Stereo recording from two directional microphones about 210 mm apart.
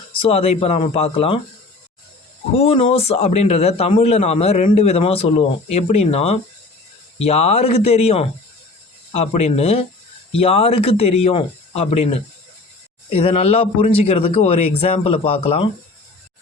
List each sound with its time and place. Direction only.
0.2 s a man's voice: 30° left (ahead or behind)
2.6 s a man's voice: 25° left (ahead or behind)
13.1 s a man's voice: 25° left (ahead or behind)